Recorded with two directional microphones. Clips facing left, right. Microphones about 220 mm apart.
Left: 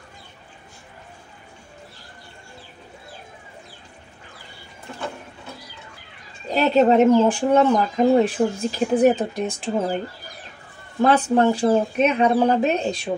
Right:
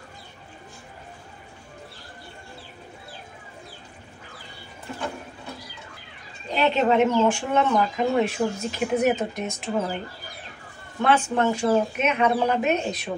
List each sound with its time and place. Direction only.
6.5 s speech: 40° left (ahead or behind)
11.0 s speech: 35° left (ahead or behind)